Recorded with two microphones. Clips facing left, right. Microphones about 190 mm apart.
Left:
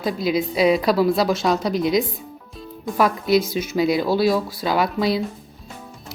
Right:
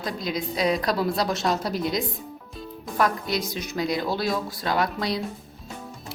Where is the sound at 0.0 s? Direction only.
5° left (ahead or behind).